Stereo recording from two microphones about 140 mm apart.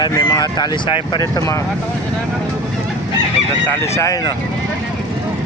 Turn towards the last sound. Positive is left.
turn(degrees=25)  # may be behind; listen again after turning